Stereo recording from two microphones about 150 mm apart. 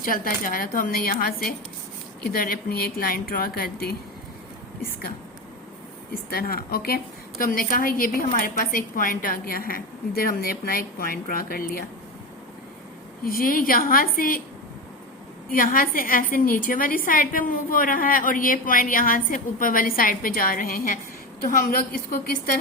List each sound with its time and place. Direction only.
0.0 s a woman's voice: 70° left (ahead or behind); by 3.9 s 85° left
4.8 s a woman's voice: 75° left (ahead or behind)
6.3 s a woman's voice: 80° left
13.2 s a woman's voice: 70° left (ahead or behind)
15.4 s a woman's voice: 70° left (ahead or behind)